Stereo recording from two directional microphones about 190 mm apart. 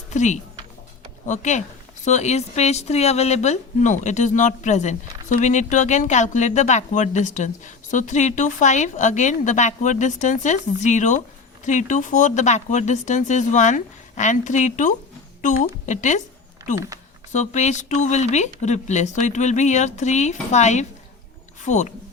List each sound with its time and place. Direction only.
0.1 s speech: 40° left (ahead or behind)
16.7 s speech: 15° right (ahead or behind)
17.3 s speech: 40° left (ahead or behind)